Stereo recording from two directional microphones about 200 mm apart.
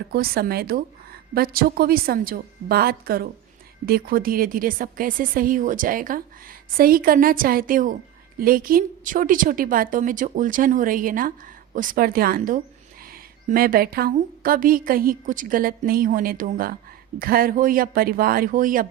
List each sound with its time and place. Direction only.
0.1 s a woman's voice: 50° right (ahead or behind)